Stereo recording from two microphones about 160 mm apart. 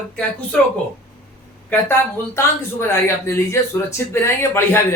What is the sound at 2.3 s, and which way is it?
Speech, 15° left (ahead or behind).